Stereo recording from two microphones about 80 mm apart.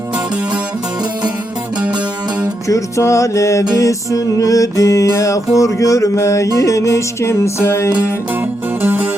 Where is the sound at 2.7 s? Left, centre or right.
Left.